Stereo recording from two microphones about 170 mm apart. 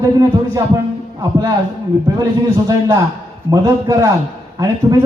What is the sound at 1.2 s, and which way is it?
Speech, 20° right (ahead or behind).